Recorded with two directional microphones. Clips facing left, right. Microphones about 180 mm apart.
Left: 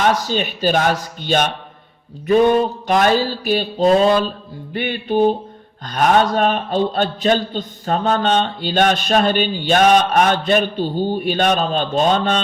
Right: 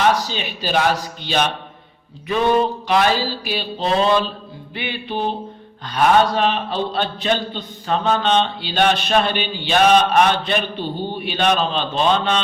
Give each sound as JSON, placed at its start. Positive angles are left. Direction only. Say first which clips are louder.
{"t": 0.0, "sound": "a man's voice", "louder": "left 1 dB", "side_deg": 45}